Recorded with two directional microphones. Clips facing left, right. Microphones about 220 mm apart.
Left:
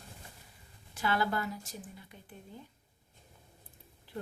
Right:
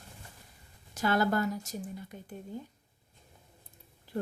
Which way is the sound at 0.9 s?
45° right (ahead or behind).